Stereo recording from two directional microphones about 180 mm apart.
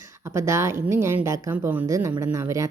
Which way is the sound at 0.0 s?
15° right (ahead or behind).